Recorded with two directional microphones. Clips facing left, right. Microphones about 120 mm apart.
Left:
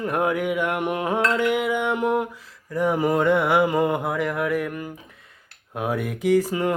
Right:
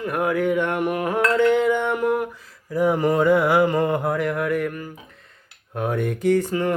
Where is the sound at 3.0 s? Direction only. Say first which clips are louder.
Right 1 dB; 10° left (ahead or behind).